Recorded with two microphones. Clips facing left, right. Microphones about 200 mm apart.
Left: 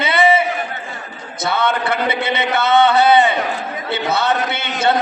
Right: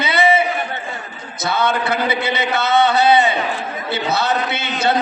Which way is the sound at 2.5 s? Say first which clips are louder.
Left 3 dB; 55° left (ahead or behind).